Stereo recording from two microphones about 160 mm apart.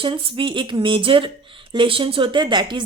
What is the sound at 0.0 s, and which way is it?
Speech, 35° right (ahead or behind).